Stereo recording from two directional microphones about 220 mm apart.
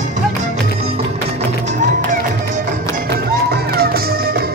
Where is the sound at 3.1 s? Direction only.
45° right (ahead or behind).